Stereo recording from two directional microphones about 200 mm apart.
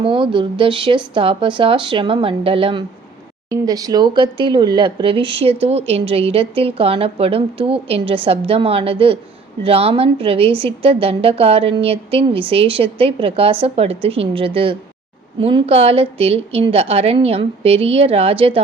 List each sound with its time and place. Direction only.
0.0 s speech: 25° right (ahead or behind)